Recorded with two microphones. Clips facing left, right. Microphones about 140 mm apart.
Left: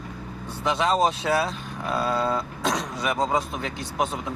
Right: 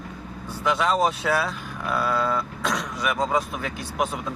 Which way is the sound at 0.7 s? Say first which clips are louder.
Even; 25° left (ahead or behind).